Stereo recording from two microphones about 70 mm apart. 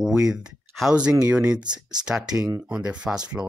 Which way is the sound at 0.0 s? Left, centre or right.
Centre.